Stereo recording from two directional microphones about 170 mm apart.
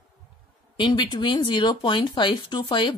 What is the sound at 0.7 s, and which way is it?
Speech, 30° left (ahead or behind).